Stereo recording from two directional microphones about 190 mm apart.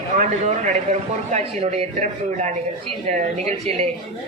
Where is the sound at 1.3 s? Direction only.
40° right (ahead or behind).